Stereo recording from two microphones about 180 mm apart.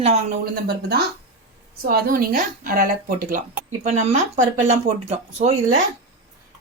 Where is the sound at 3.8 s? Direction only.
40° right (ahead or behind).